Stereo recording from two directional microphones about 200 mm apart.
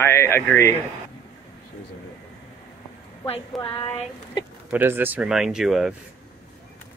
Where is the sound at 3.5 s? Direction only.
Centre (ahead or behind).